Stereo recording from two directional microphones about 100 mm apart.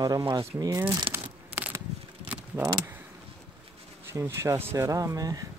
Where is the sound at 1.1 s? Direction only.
20° right (ahead or behind).